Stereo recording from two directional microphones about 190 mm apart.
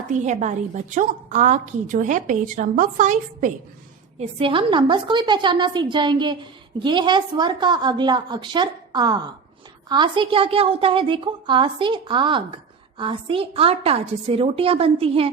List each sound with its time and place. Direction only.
0.1 s a woman's voice: 40° right (ahead or behind)
4.2 s a woman's voice: 30° right (ahead or behind)